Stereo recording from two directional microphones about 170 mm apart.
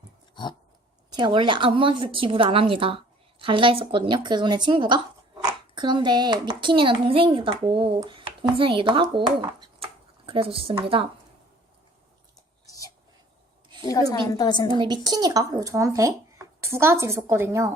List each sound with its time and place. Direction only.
1.1 s a woman's voice: 25° right (ahead or behind)
12.6 s whispering: 20° left (ahead or behind)
13.8 s a woman's voice: 20° left (ahead or behind)
14.8 s speech: 25° right (ahead or behind)